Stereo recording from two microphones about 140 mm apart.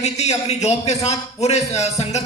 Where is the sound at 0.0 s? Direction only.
50° left (ahead or behind).